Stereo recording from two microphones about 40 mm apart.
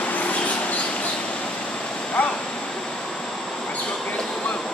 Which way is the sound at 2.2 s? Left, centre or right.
Left.